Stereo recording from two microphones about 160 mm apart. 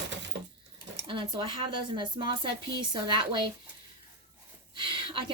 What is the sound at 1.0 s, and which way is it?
Speech, 30° right (ahead or behind).